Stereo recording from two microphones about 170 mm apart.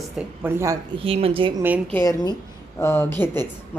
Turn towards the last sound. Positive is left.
turn(degrees=15)  # may be behind; listen again after turning